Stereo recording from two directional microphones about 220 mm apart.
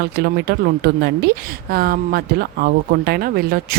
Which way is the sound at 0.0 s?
45° right (ahead or behind).